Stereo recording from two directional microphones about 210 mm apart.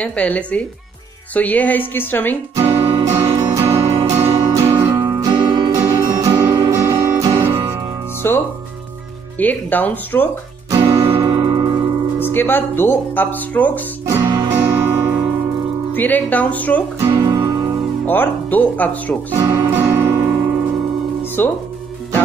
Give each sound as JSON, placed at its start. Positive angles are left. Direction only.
{"t": 0.0, "sound": "speech", "side_deg": 5}
{"t": 2.6, "sound": "music", "side_deg": -20}
{"t": 8.2, "sound": "speech", "side_deg": 10}
{"t": 10.7, "sound": "music", "side_deg": -25}
{"t": 12.3, "sound": "speech", "side_deg": 10}
{"t": 14.0, "sound": "music", "side_deg": -15}
{"t": 15.9, "sound": "speech", "side_deg": 10}
{"t": 17.0, "sound": "music", "side_deg": -15}
{"t": 18.0, "sound": "speech", "side_deg": 10}
{"t": 19.3, "sound": "music", "side_deg": -15}
{"t": 21.4, "sound": "speech", "side_deg": 10}